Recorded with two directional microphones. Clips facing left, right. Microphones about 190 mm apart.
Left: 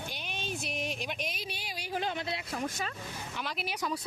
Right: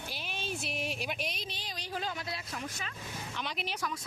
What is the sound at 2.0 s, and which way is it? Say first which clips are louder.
Speech: left 4 dB; 25° left (ahead or behind).